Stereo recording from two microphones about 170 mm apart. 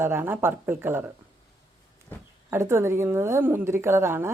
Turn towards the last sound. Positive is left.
turn(degrees=-15)  # may be behind; listen again after turning